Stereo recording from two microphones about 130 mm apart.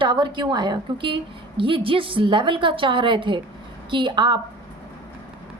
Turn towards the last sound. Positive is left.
turn(degrees=-35)  # may be behind; listen again after turning